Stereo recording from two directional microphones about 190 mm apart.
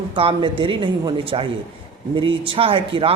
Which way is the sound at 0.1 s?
25° right (ahead or behind).